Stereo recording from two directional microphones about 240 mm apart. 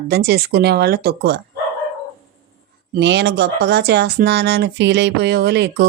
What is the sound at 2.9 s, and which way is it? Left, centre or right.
Speech, right.